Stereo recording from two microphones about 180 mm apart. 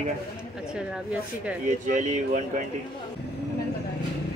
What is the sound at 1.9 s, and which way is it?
Speech, 40° right (ahead or behind).